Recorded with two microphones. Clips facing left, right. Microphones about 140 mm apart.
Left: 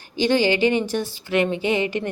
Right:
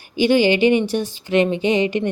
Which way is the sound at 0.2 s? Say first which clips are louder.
Right 4 dB; 15° right (ahead or behind).